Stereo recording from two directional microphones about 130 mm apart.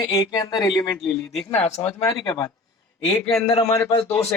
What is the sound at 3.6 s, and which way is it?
Speech, 25° left (ahead or behind).